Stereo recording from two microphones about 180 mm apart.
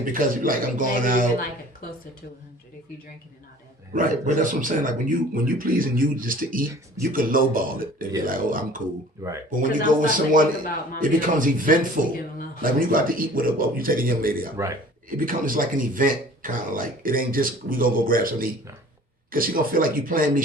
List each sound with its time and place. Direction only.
0.0 s speech: 50° right (ahead or behind)
3.9 s speech: 50° right (ahead or behind)
14.5 s a man's voice: 15° right (ahead or behind)
15.1 s speech: 50° right (ahead or behind)